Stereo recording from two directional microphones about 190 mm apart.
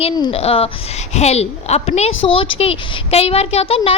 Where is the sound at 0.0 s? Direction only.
30° left (ahead or behind).